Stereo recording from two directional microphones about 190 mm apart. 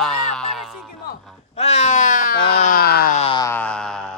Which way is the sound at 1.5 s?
35° left (ahead or behind).